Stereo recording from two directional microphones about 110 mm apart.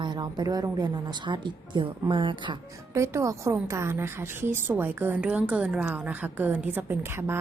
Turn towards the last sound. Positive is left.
turn(degrees=-20)  # may be behind; listen again after turning